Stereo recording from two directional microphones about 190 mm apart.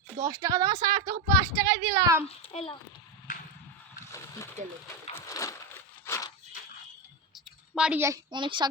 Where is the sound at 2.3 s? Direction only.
30° left (ahead or behind).